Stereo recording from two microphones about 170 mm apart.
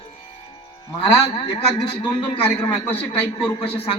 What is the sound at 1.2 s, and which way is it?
A man's voice, 30° left (ahead or behind).